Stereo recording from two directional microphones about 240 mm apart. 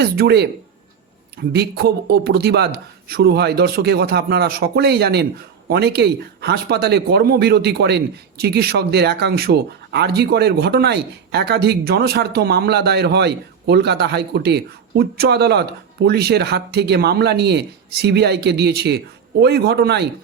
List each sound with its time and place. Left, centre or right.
0.0 s speech: right
1.5 s speech: right